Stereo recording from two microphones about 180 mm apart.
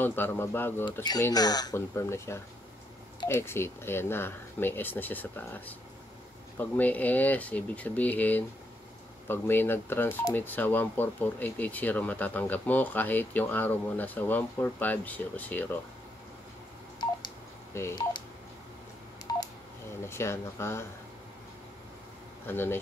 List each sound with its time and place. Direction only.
0.0 s speech: 10° left (ahead or behind)
17.7 s speech: 15° left (ahead or behind)
19.3 s telephone dialing: 20° left (ahead or behind)
20.1 s speech: 15° left (ahead or behind)
22.5 s speech: 10° left (ahead or behind)